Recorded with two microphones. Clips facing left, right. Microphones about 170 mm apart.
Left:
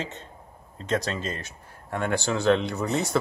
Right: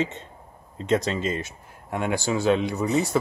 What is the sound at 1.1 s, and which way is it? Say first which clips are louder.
Speech: right 5 dB; 15° right (ahead or behind).